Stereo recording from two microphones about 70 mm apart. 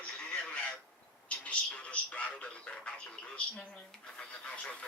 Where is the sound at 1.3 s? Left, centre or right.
Centre.